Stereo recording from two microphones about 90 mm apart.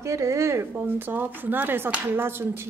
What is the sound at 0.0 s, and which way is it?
A woman's voice, 35° right (ahead or behind).